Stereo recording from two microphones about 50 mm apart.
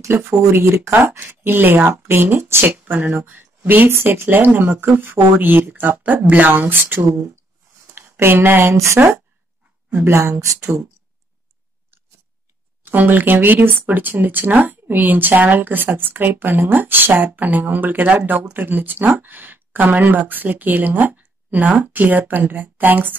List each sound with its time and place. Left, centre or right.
0.5 s speech: right
1.2 s speech: right
2.6 s speech: right
8.7 s speech: right
10.0 s speech: right
12.8 s speech: right